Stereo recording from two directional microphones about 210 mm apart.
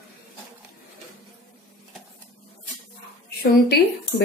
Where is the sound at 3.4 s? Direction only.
50° left (ahead or behind).